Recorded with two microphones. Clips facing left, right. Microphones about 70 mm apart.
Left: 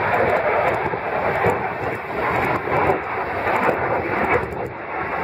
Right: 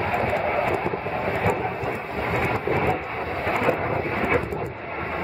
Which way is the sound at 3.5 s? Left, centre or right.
Left.